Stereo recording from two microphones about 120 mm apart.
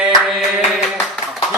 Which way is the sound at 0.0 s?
5° right (ahead or behind).